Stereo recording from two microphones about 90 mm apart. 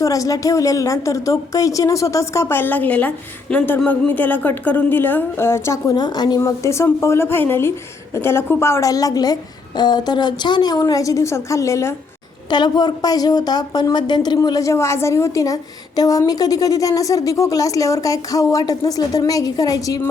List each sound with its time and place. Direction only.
0.0 s a woman's voice: 40° left (ahead or behind); by 3.1 s 20° left (ahead or behind)
3.5 s speech: 5° left (ahead or behind)
3.8 s a woman's voice: 20° left (ahead or behind)
5.9 s a woman's voice: 50° left (ahead or behind)
6.4 s a woman's voice: 35° left (ahead or behind); by 10.8 s 55° left (ahead or behind)
10.8 s a woman's voice: 40° left (ahead or behind)
12.5 s a woman's voice: 50° left (ahead or behind)
14.4 s a woman's voice: 40° left (ahead or behind)